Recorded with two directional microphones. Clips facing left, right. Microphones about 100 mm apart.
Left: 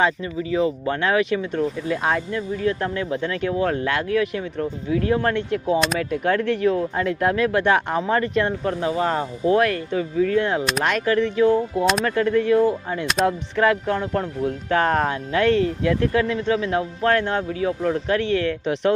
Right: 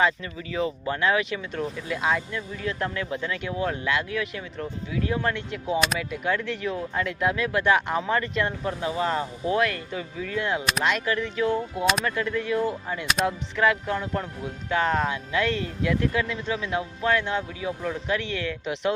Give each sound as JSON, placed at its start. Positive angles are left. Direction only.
{"t": 0.0, "sound": "speech", "side_deg": 30}
{"t": 14.7, "sound": "speech", "side_deg": 50}